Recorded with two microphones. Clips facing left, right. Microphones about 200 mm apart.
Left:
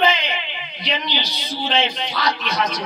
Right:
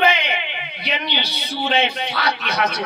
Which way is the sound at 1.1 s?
65° right (ahead or behind).